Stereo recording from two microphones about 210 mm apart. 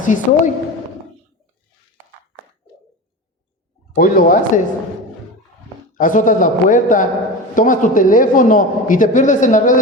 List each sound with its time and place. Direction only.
0.0 s a man's voice: 35° left (ahead or behind)
3.9 s a man's voice: 40° left (ahead or behind)
5.9 s a man's voice: 40° left (ahead or behind)